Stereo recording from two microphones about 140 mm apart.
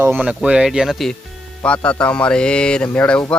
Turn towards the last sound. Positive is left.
turn(degrees=5)  # may be behind; listen again after turning